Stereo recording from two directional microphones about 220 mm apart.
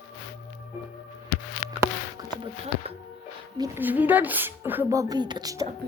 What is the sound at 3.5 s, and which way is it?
A woman's voice, 15° right (ahead or behind).